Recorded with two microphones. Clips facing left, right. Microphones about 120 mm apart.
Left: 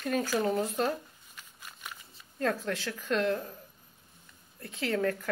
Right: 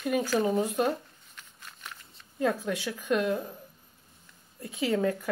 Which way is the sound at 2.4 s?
15° right (ahead or behind).